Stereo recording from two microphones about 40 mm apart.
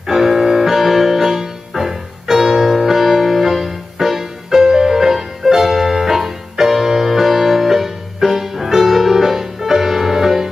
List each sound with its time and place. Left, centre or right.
0.0 s music: centre